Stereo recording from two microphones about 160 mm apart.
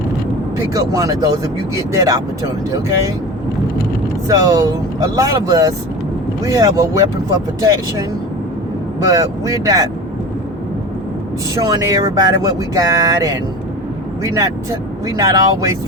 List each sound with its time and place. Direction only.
0.7 s speech: 20° right (ahead or behind)
4.3 s speech: 20° right (ahead or behind)
9.0 s speech: 20° right (ahead or behind)
11.5 s speech: 20° right (ahead or behind)
14.3 s speech: 20° right (ahead or behind)